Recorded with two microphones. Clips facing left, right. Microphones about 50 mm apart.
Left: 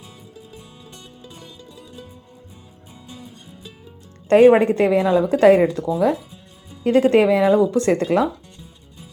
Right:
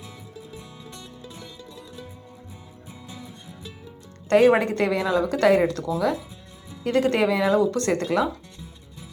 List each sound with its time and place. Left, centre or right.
4.4 s a woman's voice: left